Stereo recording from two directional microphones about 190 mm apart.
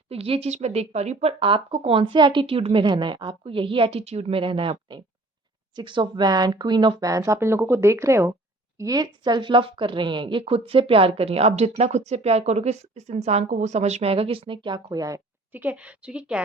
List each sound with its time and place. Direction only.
0.1 s speech: 30° right (ahead or behind); by 16.4 s 5° right (ahead or behind)